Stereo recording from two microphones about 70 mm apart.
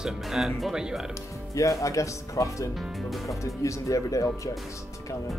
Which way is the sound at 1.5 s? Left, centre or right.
Left.